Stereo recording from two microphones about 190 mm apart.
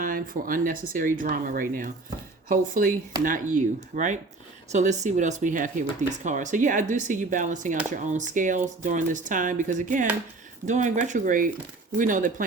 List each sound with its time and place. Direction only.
0.0 s speech: 45° right (ahead or behind)